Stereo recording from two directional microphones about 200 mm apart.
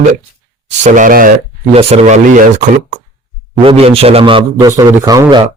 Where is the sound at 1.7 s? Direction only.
30° right (ahead or behind).